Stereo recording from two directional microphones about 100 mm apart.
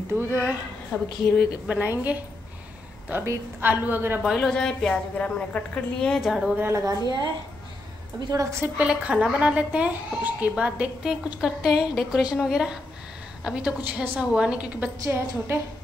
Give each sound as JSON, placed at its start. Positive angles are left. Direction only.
{"t": 0.3, "sound": "speech", "side_deg": -20}
{"t": 0.9, "sound": "a woman's voice", "side_deg": 15}
{"t": 1.7, "sound": "a woman's voice", "side_deg": -15}
{"t": 4.3, "sound": "a woman's voice", "side_deg": 5}
{"t": 6.5, "sound": "a woman's voice", "side_deg": -25}
{"t": 8.3, "sound": "a woman's voice", "side_deg": -30}
{"t": 8.7, "sound": "speech", "side_deg": -10}
{"t": 15.0, "sound": "a woman's voice", "side_deg": -25}